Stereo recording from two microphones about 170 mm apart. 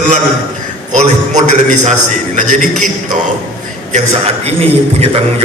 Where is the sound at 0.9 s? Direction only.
45° right (ahead or behind).